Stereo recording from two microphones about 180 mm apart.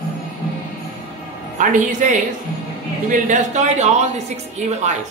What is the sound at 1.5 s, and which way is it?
A woman's voice, 45° right (ahead or behind).